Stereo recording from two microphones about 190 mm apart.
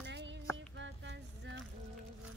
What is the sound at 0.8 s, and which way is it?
Music, 70° right (ahead or behind).